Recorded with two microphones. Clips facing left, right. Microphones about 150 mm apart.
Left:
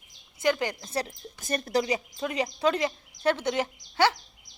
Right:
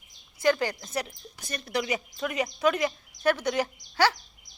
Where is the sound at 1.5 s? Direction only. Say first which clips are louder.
Left 4 dB; 45° left (ahead or behind).